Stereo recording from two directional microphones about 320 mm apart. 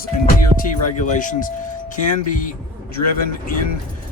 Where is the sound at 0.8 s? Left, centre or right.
Left.